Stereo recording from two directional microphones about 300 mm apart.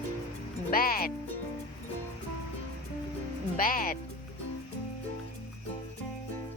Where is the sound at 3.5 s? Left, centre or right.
Left.